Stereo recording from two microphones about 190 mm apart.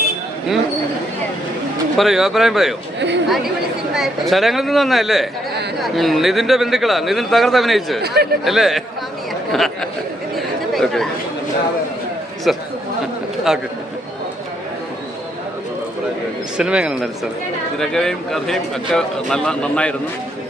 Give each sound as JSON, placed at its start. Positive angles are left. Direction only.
{"t": 2.0, "sound": "speech", "side_deg": 0}
{"t": 8.0, "sound": "speech", "side_deg": -55}
{"t": 8.4, "sound": "speech", "side_deg": 0}
{"t": 10.3, "sound": "chatter", "side_deg": 0}
{"t": 12.5, "sound": "speech", "side_deg": 0}
{"t": 16.6, "sound": "speech", "side_deg": -5}